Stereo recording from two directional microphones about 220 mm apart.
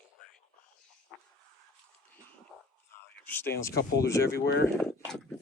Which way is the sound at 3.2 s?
10° left (ahead or behind).